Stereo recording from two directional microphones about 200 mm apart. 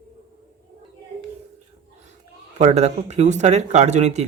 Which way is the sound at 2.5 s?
35° right (ahead or behind).